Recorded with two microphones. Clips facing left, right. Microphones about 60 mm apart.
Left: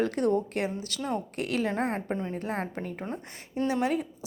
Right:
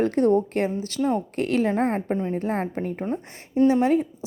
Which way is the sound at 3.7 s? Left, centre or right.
Right.